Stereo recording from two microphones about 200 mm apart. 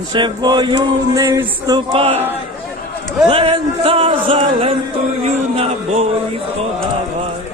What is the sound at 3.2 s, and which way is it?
Music, 30° right (ahead or behind).